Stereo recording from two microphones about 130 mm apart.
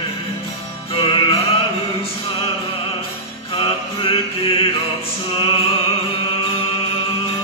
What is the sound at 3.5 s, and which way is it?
Chant, 45° left (ahead or behind).